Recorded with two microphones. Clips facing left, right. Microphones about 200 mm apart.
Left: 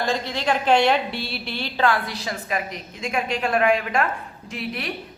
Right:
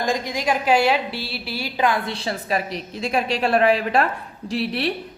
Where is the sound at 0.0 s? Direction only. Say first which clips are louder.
Right 1 dB; 15° right (ahead or behind).